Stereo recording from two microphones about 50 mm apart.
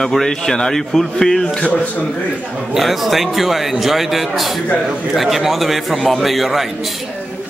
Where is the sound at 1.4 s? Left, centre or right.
Left.